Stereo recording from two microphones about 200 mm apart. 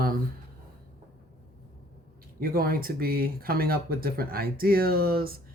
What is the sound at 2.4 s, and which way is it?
Speech, 45° right (ahead or behind).